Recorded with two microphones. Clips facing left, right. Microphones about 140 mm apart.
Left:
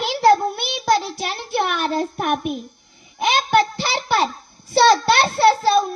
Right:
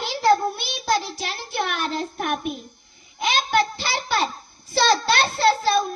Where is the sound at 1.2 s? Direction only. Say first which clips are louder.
Left 5 dB; 55° left (ahead or behind).